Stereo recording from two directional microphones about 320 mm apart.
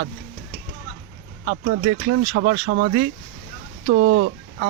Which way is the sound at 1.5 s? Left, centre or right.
Right.